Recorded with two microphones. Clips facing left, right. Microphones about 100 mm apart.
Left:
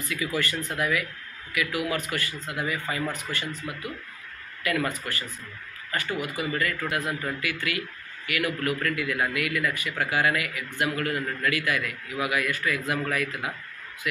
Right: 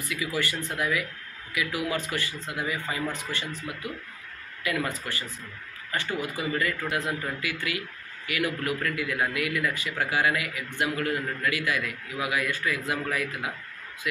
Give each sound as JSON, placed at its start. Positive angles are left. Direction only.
{"t": 0.0, "sound": "a man's voice", "side_deg": -15}
{"t": 4.6, "sound": "a man's voice", "side_deg": -20}